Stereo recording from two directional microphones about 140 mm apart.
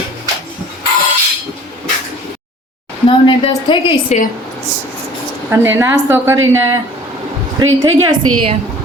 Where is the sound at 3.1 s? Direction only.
35° left (ahead or behind).